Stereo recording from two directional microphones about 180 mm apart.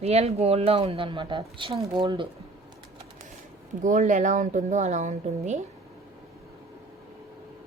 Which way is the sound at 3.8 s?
45° right (ahead or behind).